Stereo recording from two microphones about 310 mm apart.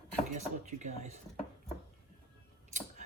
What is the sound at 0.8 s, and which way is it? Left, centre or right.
Speech, right.